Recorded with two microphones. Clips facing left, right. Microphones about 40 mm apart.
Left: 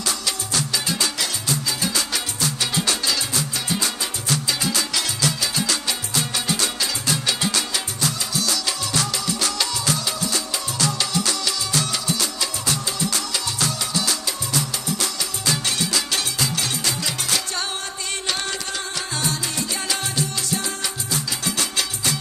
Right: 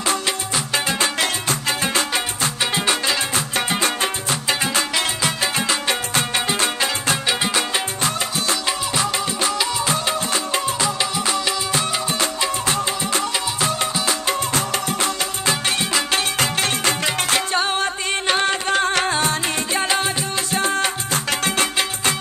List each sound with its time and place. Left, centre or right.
0.0 s music: right
10.8 s music: right
16.3 s music: right
19.1 s music: right